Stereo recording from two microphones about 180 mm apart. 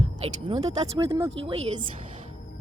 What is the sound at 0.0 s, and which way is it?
Speech, 30° right (ahead or behind).